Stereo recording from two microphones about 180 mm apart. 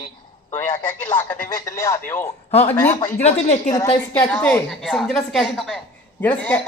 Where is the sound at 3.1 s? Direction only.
40° left (ahead or behind).